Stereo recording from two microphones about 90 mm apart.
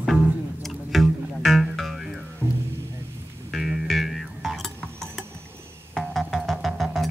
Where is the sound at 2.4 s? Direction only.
25° right (ahead or behind).